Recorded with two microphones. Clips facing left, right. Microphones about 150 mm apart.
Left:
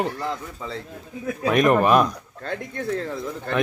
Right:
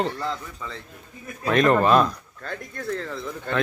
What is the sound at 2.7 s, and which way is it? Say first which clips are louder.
Speech: left 2 dB; 55° left (ahead or behind).